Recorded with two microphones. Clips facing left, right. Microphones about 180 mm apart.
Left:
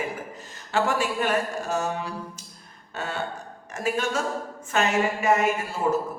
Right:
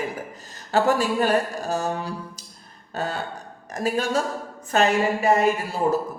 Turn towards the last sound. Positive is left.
turn(degrees=-35)  # may be behind; listen again after turning